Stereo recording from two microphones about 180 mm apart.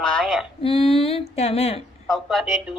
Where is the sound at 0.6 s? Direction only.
30° left (ahead or behind).